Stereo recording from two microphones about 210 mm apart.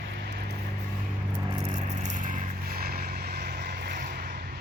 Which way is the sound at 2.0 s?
40° right (ahead or behind).